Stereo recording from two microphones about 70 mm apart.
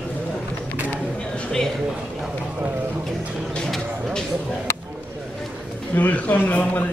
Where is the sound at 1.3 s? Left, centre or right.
Centre.